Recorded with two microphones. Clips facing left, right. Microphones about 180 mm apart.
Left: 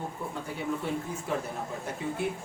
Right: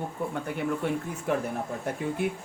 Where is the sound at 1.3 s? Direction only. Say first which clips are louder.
Right 6 dB; 55° right (ahead or behind).